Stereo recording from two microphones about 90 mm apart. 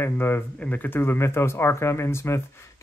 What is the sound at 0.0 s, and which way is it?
Speech, 25° left (ahead or behind).